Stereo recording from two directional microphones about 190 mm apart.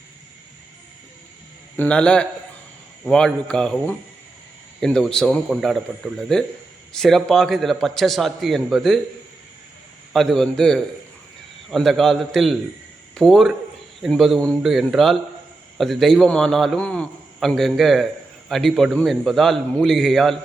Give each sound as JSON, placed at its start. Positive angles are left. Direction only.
{"t": 1.7, "sound": "a man's voice", "side_deg": 10}
{"t": 10.1, "sound": "a man's voice", "side_deg": 0}